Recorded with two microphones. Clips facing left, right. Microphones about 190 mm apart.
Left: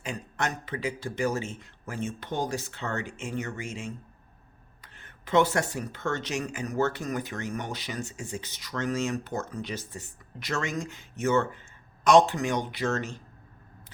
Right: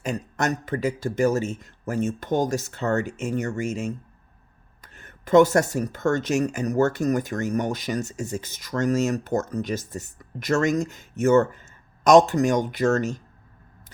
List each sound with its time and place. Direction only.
0.0 s speech: 40° right (ahead or behind)